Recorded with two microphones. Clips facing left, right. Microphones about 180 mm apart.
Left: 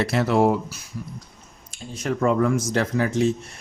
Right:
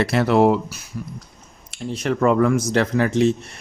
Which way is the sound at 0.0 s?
65° right (ahead or behind).